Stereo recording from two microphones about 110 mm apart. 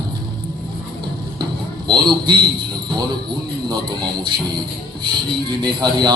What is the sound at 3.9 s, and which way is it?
Speech, 40° right (ahead or behind).